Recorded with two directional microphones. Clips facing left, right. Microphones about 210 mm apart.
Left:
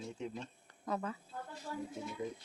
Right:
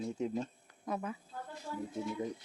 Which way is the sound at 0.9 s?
15° right (ahead or behind).